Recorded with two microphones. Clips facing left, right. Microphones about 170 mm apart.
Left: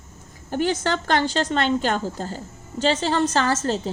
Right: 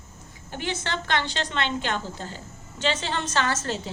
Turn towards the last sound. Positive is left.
turn(degrees=35)  # may be behind; listen again after turning